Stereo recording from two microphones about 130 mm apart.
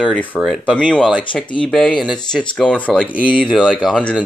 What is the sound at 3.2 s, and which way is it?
Speech, 10° right (ahead or behind).